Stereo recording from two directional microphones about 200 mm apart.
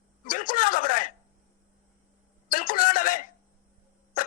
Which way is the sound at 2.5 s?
45° left (ahead or behind).